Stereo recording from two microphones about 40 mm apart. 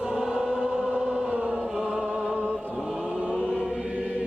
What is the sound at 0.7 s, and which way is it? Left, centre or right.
Choir, right.